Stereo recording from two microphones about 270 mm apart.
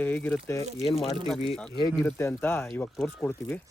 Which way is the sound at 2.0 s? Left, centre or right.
Centre.